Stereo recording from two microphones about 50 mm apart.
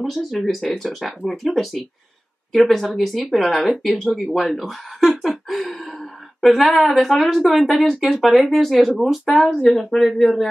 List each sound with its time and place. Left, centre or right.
0.0 s a woman's voice: centre
5.2 s a sound: centre
6.5 s speech: centre
6.8 s a woman's voice: centre